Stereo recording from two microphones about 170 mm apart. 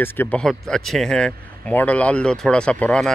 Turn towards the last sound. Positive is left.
turn(degrees=5)  # may be behind; listen again after turning